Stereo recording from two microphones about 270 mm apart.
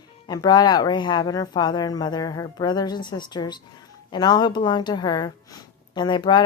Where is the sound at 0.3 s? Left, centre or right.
Centre.